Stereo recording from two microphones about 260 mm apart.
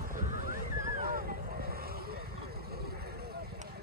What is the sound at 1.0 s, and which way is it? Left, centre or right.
Vehicle, right.